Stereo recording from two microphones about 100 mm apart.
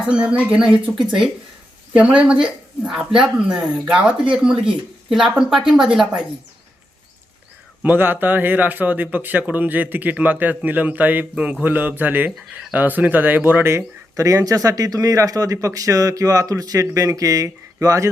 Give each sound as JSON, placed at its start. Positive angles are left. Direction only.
{"t": 0.1, "sound": "speech", "side_deg": -10}
{"t": 5.1, "sound": "speech", "side_deg": -5}
{"t": 7.8, "sound": "speech", "side_deg": -20}